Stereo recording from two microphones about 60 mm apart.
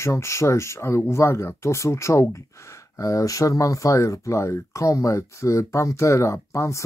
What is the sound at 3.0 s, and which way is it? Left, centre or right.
Speech, left.